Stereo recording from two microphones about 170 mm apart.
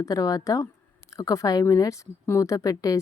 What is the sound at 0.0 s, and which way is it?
A woman's voice, 20° left (ahead or behind).